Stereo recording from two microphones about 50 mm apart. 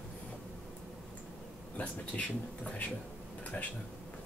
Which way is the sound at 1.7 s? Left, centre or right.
Left.